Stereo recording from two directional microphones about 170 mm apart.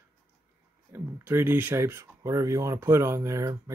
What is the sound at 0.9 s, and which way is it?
Speech, 15° right (ahead or behind).